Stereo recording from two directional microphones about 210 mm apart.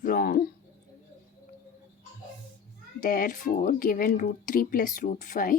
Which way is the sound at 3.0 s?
40° left (ahead or behind).